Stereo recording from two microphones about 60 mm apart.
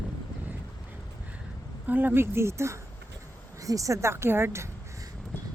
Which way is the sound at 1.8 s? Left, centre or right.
Right.